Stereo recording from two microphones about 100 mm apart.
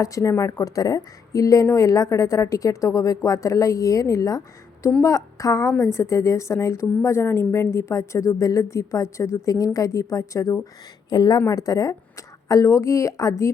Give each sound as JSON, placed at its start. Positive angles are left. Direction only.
{"t": 0.0, "sound": "a woman's voice", "side_deg": 30}
{"t": 11.1, "sound": "a woman's voice", "side_deg": 45}